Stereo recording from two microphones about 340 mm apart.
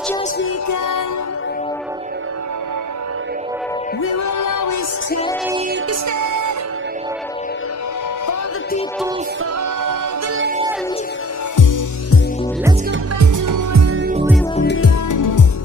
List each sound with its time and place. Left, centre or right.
0.7 s music: left
4.4 s music: left
5.9 s music: right
11.5 s music: left
13.2 s music: right
14.5 s music: left
15.0 s music: left